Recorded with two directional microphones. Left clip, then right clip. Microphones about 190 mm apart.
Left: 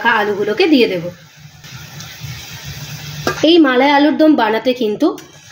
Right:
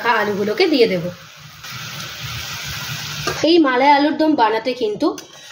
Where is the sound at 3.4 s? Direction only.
45° left (ahead or behind).